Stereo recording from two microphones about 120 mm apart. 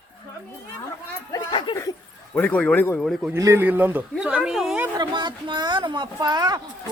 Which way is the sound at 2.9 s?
Centre (ahead or behind).